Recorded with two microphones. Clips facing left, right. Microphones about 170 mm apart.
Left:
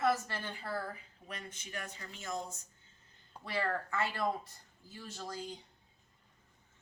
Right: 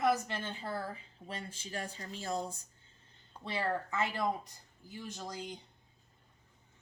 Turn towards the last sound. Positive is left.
turn(degrees=-20)  # may be behind; listen again after turning